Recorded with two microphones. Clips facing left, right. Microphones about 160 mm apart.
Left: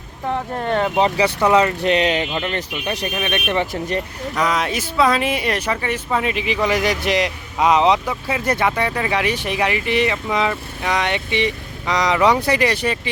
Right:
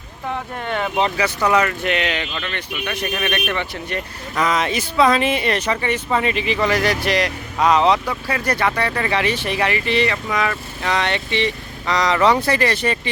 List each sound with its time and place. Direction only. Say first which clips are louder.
0.6 s speech: left 3 dB; 35° left (ahead or behind)
3.2 s speech: right 2 dB; 15° left (ahead or behind)
3.7 s speech: left 4 dB; 40° left (ahead or behind)
4.4 s speech: right 2 dB; 5° left (ahead or behind)
8.9 s speech: even; 5° left (ahead or behind)